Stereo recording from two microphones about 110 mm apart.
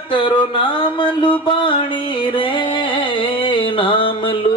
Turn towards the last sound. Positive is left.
turn(degrees=50)  # may be behind; listen again after turning